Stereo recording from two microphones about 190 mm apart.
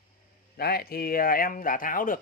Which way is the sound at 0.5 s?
55° left (ahead or behind).